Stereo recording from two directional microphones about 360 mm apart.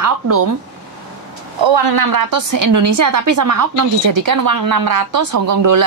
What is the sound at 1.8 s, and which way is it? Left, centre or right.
Speech, right.